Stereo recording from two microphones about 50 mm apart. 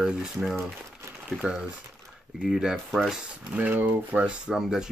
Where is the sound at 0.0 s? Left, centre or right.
Centre.